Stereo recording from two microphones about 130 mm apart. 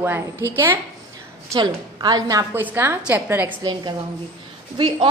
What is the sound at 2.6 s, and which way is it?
Speech, 15° right (ahead or behind).